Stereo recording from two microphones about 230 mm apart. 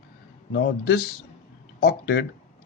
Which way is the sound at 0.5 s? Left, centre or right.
Left.